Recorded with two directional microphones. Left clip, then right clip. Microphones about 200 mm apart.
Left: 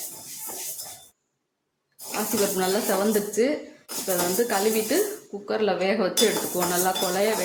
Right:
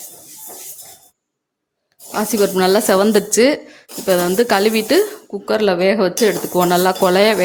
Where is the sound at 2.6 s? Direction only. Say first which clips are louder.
Right 14 dB; 55° right (ahead or behind).